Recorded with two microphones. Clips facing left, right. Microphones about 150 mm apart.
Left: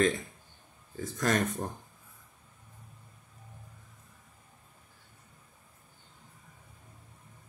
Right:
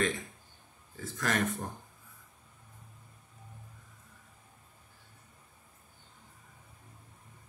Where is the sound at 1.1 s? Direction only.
35° left (ahead or behind).